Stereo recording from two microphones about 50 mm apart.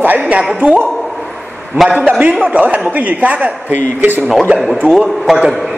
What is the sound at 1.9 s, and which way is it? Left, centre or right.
A man's voice, right.